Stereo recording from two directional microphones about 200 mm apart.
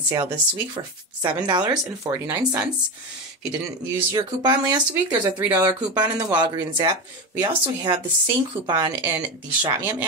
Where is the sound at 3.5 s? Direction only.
15° right (ahead or behind).